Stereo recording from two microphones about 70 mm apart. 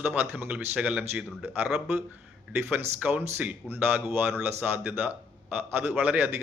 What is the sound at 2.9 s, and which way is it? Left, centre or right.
Speech, right.